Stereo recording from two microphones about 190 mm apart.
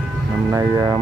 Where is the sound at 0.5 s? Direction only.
15° right (ahead or behind).